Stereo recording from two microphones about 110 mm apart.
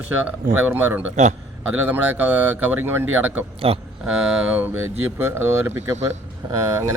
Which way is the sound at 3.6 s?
60° right (ahead or behind).